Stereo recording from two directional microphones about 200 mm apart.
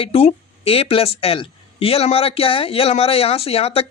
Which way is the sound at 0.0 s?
30° left (ahead or behind).